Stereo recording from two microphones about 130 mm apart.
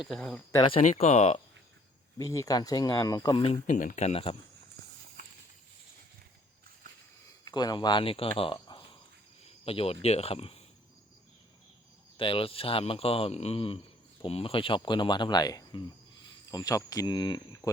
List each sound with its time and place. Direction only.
0.0 s speech: centre (ahead or behind)
0.8 s speech: 60° left (ahead or behind)
2.1 s speech: 25° left (ahead or behind)
3.8 s speech: 75° left (ahead or behind); by 4.4 s 50° left (ahead or behind)
7.4 s speech: 30° left (ahead or behind)
9.6 s speech: 50° left (ahead or behind)
12.1 s speech: 45° left (ahead or behind)